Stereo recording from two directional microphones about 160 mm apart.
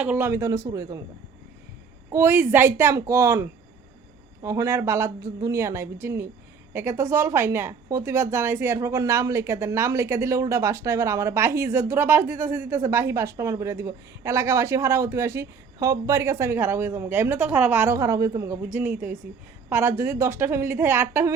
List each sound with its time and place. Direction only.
0.0 s a man's voice: 10° right (ahead or behind)
2.0 s speech: 15° right (ahead or behind)